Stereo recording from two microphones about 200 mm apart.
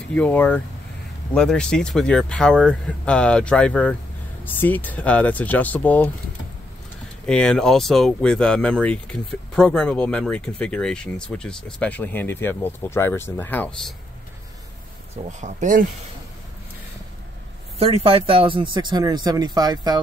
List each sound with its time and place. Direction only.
0.1 s speech: 5° left (ahead or behind)
7.2 s speech: 5° left (ahead or behind)
15.2 s speech: 40° right (ahead or behind)
17.7 s speech: 30° right (ahead or behind)